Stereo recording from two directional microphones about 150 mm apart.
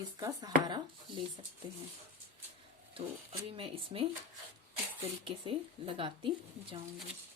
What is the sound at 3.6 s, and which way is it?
Speech, 35° right (ahead or behind).